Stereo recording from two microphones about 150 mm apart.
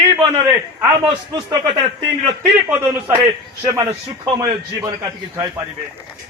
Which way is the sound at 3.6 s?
30° right (ahead or behind).